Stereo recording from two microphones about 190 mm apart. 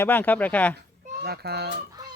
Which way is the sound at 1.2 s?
60° right (ahead or behind).